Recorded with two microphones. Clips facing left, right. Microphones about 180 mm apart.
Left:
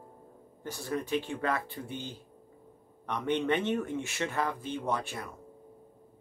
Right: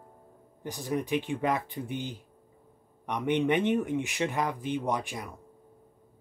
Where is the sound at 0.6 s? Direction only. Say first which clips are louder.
Right 3 dB; 15° right (ahead or behind).